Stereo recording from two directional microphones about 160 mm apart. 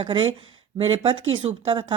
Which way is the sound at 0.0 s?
30° right (ahead or behind).